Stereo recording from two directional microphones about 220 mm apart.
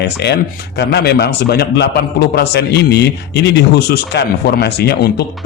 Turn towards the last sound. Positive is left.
turn(degrees=45)  # may be behind; listen again after turning